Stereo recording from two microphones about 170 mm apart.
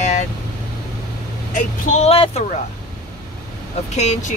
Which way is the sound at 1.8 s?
40° left (ahead or behind).